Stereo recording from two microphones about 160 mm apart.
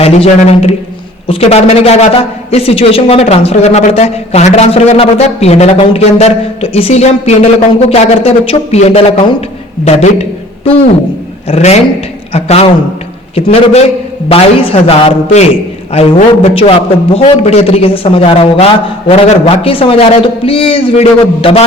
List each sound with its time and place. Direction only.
0.0 s a man's voice: 40° left (ahead or behind)